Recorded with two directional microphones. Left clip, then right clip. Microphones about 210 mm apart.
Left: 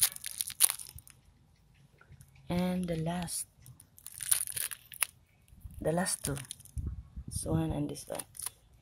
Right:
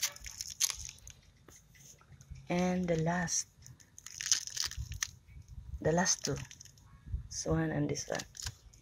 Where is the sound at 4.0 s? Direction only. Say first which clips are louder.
Right 6 dB; 70° left (ahead or behind).